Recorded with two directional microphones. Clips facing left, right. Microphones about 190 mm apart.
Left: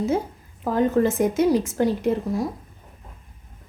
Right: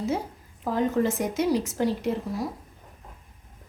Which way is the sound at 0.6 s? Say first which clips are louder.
Left 4 dB; 50° left (ahead or behind).